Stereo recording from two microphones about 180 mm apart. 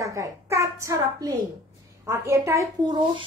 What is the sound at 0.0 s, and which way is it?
A woman's voice, 15° right (ahead or behind).